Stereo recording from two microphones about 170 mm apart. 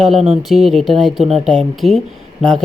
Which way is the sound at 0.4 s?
Centre (ahead or behind).